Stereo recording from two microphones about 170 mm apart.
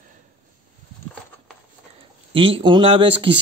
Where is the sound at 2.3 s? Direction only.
30° right (ahead or behind).